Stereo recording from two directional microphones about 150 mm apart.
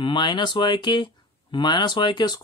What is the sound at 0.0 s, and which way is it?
Speech, 30° left (ahead or behind).